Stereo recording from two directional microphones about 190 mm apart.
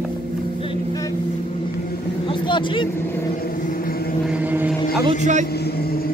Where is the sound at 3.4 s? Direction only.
45° left (ahead or behind).